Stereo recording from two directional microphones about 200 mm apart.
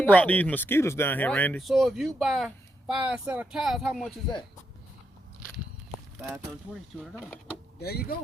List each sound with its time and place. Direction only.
0.0 s speech: 5° left (ahead or behind)
7.8 s speech: 50° left (ahead or behind)